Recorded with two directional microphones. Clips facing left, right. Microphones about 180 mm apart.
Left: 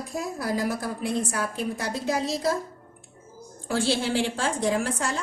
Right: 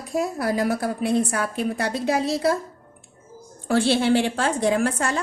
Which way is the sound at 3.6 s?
60° right (ahead or behind).